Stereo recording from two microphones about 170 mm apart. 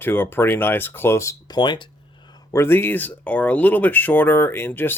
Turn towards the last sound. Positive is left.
turn(degrees=10)  # may be behind; listen again after turning